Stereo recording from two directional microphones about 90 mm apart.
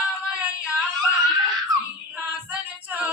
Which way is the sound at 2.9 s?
15° right (ahead or behind).